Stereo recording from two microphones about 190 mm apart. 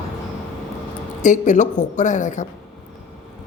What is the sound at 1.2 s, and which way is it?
Speech, 40° left (ahead or behind).